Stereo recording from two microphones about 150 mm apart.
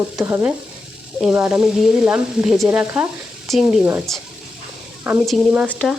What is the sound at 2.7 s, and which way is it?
Frying, 10° right (ahead or behind).